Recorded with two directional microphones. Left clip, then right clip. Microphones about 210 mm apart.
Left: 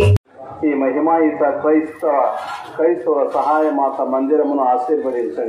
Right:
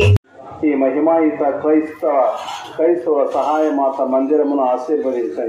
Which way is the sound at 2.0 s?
30° right (ahead or behind).